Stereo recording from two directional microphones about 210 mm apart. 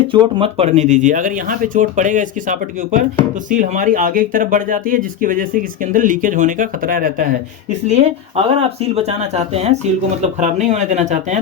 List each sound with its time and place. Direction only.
0.1 s speech: 25° right (ahead or behind); by 7.3 s 40° right (ahead or behind)
7.9 s speech: 30° right (ahead or behind)